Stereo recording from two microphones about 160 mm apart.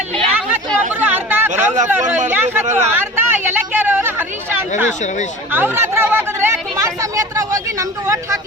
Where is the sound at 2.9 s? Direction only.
15° right (ahead or behind).